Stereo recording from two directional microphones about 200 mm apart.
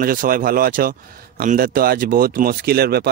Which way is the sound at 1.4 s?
45° right (ahead or behind).